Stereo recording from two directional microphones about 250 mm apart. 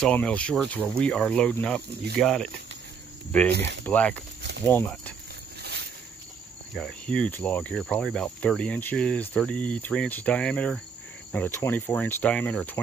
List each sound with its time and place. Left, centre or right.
0.0 s speech: centre
5.6 s a sound: right
6.7 s speech: centre